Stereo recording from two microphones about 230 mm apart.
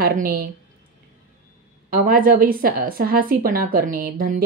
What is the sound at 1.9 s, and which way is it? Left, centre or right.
A woman's voice, right.